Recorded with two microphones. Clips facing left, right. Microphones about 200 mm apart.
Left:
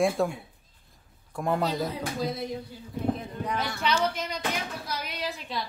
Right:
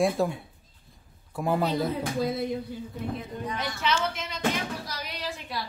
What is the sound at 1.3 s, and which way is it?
Speech, 5° right (ahead or behind).